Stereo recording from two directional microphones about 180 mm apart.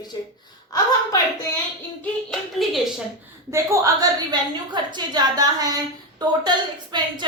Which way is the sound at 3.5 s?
15° right (ahead or behind).